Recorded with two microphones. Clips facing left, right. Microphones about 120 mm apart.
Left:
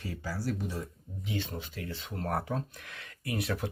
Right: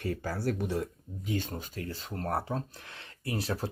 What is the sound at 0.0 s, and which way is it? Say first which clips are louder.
Speech: right 4 dB; 55° right (ahead or behind).